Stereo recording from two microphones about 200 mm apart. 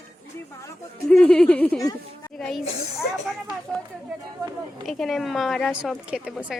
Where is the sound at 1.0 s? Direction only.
5° left (ahead or behind).